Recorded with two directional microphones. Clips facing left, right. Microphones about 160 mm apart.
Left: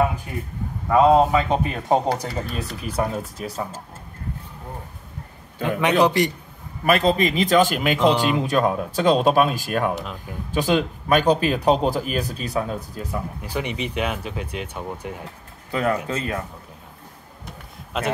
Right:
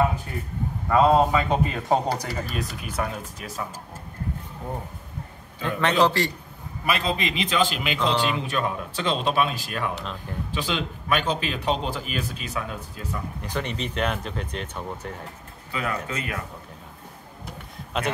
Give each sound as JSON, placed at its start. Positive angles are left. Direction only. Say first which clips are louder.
{"t": 0.8, "sound": "a man's voice", "louder": "left 3 dB", "side_deg": 15}
{"t": 2.8, "sound": "speech", "louder": "left 5 dB", "side_deg": 35}
{"t": 5.6, "sound": "speech", "louder": "left 3 dB", "side_deg": 15}
{"t": 6.9, "sound": "speech", "louder": "left 7 dB", "side_deg": 45}
{"t": 9.9, "sound": "speech", "louder": "left 2 dB", "side_deg": 5}
{"t": 10.5, "sound": "speech", "louder": "left 9 dB", "side_deg": 45}
{"t": 13.0, "sound": "speech", "louder": "left 3 dB", "side_deg": 10}
{"t": 15.7, "sound": "a man's voice", "louder": "left 6 dB", "side_deg": 40}